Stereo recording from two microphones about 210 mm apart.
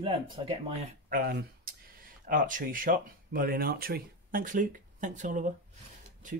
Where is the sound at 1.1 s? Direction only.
45° right (ahead or behind).